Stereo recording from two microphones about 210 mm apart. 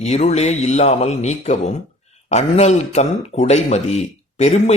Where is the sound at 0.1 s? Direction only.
30° left (ahead or behind).